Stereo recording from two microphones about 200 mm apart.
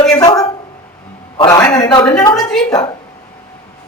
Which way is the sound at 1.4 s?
15° left (ahead or behind).